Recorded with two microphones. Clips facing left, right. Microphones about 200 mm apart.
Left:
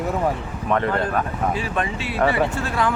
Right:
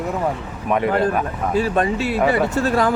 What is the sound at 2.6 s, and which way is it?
Speech, 40° right (ahead or behind).